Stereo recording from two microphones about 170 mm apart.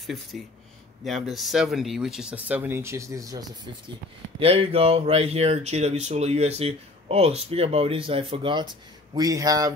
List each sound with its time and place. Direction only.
0.0 s speech: centre (ahead or behind); by 3.4 s 20° right (ahead or behind)
4.4 s speech: 35° right (ahead or behind)